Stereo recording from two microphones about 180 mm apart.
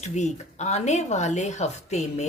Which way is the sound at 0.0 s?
40° left (ahead or behind).